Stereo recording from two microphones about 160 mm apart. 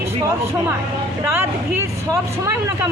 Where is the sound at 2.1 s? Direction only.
20° right (ahead or behind).